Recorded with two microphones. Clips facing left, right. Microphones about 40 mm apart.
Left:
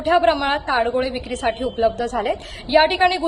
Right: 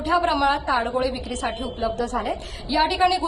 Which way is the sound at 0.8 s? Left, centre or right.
Left.